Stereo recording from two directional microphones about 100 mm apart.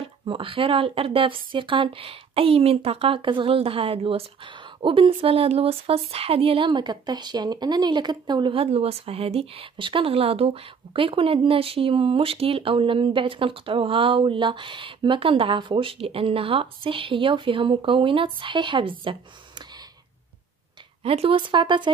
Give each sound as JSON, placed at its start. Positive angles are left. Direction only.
{"t": 0.3, "sound": "speech", "side_deg": -60}
{"t": 4.8, "sound": "speech", "side_deg": -60}
{"t": 8.5, "sound": "speech", "side_deg": -75}
{"t": 21.0, "sound": "speech", "side_deg": -75}